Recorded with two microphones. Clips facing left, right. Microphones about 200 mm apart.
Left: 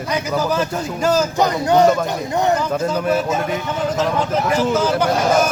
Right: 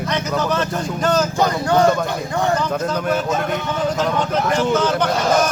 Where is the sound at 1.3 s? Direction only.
20° left (ahead or behind).